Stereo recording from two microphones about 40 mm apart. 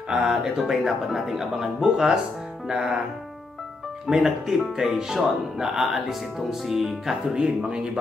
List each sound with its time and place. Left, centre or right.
0.2 s speech: centre
0.8 s speech: centre
4.1 s speech: centre
7.3 s speech: right